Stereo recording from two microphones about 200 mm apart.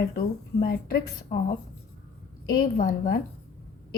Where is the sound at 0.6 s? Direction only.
50° left (ahead or behind).